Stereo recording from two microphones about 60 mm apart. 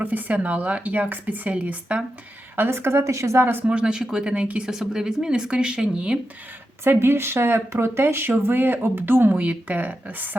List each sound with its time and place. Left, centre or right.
0.0 s speech: right
2.6 s speech: right
3.0 s speech: right
3.7 s a woman's voice: centre
4.7 s a woman's voice: centre
7.0 s speech: right
9.4 s speech: right